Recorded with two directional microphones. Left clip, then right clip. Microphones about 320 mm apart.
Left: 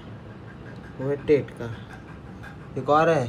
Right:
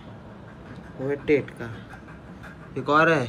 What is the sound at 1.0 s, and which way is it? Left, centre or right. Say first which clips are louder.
Speech: left 1 dB; centre.